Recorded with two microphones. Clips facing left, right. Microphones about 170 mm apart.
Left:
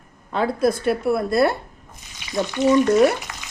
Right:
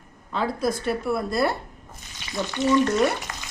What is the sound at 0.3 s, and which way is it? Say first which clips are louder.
Speech: left 5 dB; 60° left (ahead or behind).